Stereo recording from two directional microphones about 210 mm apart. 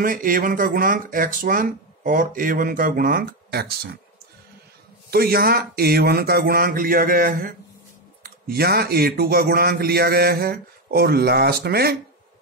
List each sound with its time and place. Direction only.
0.0 s speech: 40° right (ahead or behind)
5.1 s a man's voice: 45° right (ahead or behind)